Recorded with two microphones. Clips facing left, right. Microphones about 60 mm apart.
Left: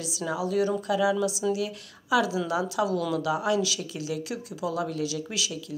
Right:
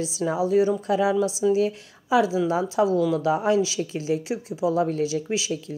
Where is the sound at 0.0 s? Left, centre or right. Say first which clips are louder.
Right 6 dB; right.